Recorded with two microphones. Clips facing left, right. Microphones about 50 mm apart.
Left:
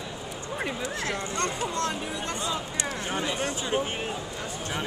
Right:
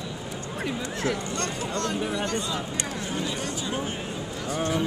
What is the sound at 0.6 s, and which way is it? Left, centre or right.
Speech, centre.